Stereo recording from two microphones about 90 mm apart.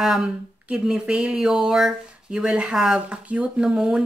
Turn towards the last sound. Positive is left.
turn(degrees=-5)  # may be behind; listen again after turning